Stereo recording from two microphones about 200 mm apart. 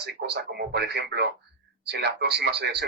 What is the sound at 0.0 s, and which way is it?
Speech, 55° right (ahead or behind).